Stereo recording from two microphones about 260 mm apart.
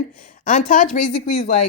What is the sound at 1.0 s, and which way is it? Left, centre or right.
Speech, left.